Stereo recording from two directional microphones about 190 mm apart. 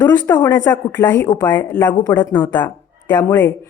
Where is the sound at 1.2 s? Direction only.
20° left (ahead or behind).